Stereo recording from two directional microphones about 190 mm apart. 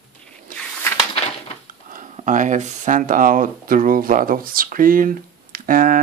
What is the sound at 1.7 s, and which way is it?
Speech, 45° right (ahead or behind).